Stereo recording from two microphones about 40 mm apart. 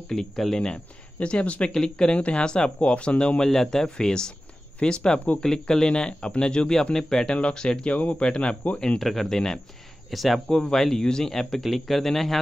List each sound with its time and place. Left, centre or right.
0.1 s speech: centre
1.2 s speech: left
1.7 s speech: centre
2.1 s speech: left
3.4 s speech: centre
7.9 s speech: left
9.0 s speech: centre
10.1 s speech: centre
10.5 s speech: centre